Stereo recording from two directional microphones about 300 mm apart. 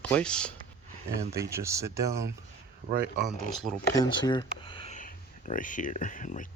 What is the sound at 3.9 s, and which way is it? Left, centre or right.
Speech, centre.